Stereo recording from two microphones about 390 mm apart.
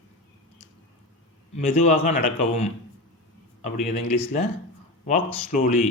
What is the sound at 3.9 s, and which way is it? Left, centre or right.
A man's voice, centre.